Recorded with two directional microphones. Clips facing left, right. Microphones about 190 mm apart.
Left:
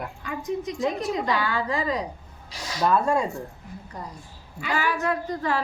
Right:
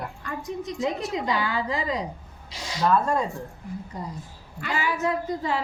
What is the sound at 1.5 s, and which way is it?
Speech, 25° right (ahead or behind).